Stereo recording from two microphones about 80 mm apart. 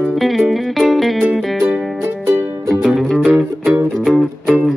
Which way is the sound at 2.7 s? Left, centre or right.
Centre.